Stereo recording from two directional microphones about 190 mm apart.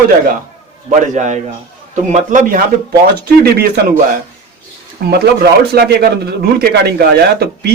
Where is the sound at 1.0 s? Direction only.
40° right (ahead or behind).